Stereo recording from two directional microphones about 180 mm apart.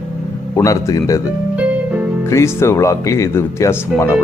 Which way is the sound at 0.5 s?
15° left (ahead or behind).